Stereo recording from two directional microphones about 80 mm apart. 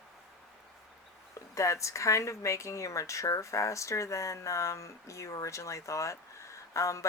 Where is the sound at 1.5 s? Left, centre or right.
Left.